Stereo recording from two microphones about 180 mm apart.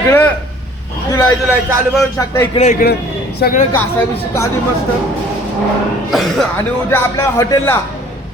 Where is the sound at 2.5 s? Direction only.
35° left (ahead or behind).